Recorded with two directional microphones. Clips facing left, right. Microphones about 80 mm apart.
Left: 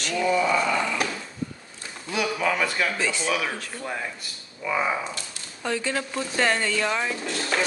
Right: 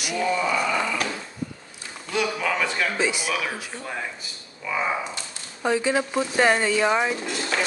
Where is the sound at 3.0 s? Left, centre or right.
Centre.